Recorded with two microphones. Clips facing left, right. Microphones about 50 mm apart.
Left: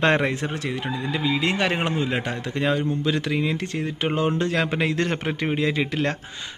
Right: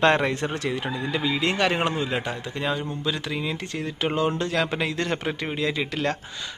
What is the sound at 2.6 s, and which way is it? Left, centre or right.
Speech, left.